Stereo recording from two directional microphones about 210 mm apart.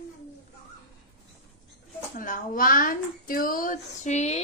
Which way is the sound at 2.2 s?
40° left (ahead or behind).